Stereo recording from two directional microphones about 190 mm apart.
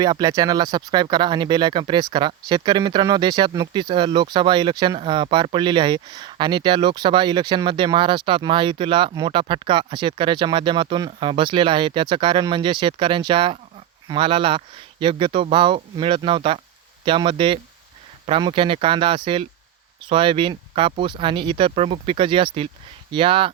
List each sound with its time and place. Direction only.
0.0 s speech: 20° right (ahead or behind)